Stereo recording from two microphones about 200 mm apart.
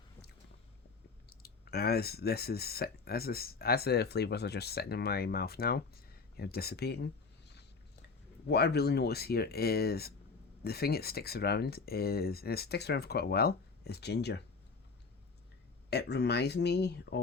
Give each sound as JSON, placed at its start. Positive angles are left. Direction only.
{"t": 1.3, "sound": "speech", "side_deg": 50}
{"t": 8.4, "sound": "speech", "side_deg": 55}
{"t": 15.9, "sound": "speech", "side_deg": 55}